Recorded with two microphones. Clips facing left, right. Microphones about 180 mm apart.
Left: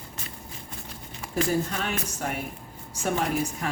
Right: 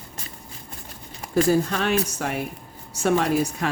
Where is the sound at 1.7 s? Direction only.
85° right.